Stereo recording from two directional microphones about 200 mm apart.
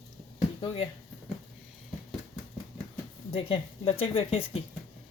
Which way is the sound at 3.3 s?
30° left (ahead or behind).